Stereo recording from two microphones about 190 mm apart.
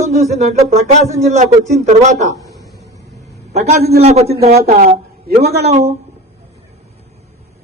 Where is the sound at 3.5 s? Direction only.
35° right (ahead or behind).